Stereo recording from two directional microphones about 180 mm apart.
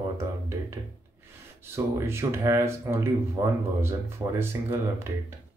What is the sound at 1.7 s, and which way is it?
Speech, 15° right (ahead or behind).